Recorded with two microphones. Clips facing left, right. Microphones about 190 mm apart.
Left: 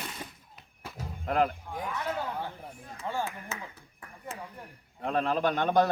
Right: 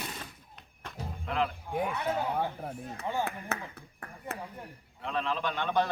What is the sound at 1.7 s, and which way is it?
Speech, 60° right (ahead or behind).